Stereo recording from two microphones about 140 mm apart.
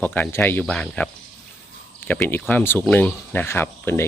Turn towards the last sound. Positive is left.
turn(degrees=15)  # may be behind; listen again after turning